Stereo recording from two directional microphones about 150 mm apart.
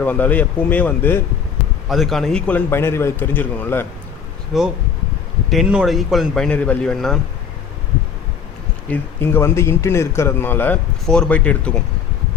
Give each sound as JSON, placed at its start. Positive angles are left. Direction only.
{"t": 0.0, "sound": "a man's voice", "side_deg": 10}
{"t": 1.9, "sound": "a man's voice", "side_deg": 0}
{"t": 4.5, "sound": "speech", "side_deg": 0}
{"t": 8.9, "sound": "a man's voice", "side_deg": 15}